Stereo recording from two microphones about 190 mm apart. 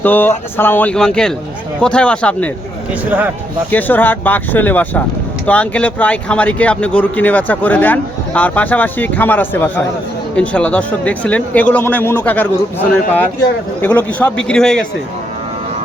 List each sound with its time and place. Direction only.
0.0 s a man's voice: 10° left (ahead or behind)
3.1 s speech: 10° right (ahead or behind)
3.7 s a man's voice: 10° left (ahead or behind)